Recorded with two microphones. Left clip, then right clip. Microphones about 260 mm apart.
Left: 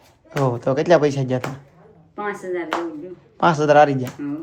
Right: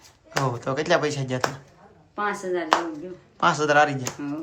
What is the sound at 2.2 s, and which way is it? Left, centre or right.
Speech, centre.